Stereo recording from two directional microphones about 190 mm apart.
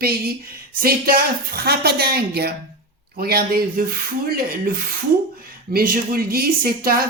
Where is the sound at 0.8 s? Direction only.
50° right (ahead or behind).